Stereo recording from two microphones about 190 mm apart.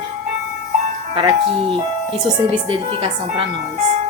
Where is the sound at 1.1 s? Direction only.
25° right (ahead or behind).